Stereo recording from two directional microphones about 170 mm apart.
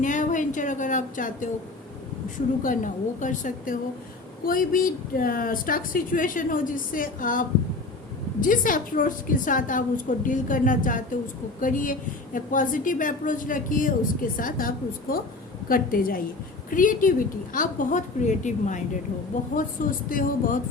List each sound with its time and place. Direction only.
0.0 s a woman's voice: 45° left (ahead or behind)
2.6 s a woman's voice: 50° left (ahead or behind)
15.7 s a woman's voice: 55° left (ahead or behind)